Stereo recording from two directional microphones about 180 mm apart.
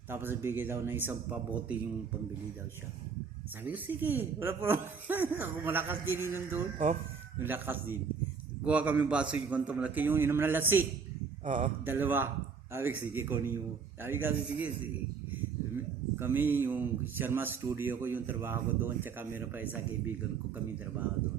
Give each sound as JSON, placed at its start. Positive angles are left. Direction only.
{"t": 0.1, "sound": "speech", "side_deg": -10}
{"t": 3.6, "sound": "speech", "side_deg": -10}
{"t": 11.4, "sound": "a man's voice", "side_deg": -45}
{"t": 11.9, "sound": "speech", "side_deg": -10}
{"t": 16.1, "sound": "speech", "side_deg": -10}